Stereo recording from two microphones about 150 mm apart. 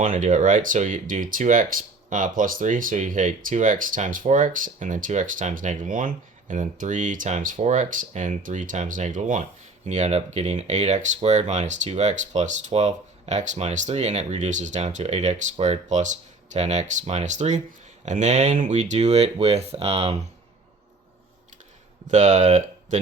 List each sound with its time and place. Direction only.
0.0 s speech: 60° right (ahead or behind)
22.0 s speech: 55° right (ahead or behind)